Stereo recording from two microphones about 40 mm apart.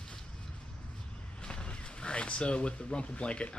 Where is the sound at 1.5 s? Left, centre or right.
Left.